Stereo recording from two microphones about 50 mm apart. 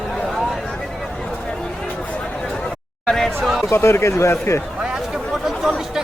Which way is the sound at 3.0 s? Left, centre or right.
Centre.